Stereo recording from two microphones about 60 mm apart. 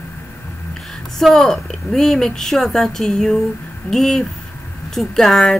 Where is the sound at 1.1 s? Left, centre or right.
Centre.